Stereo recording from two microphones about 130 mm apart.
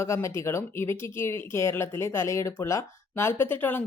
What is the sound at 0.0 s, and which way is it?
Speech, 20° left (ahead or behind).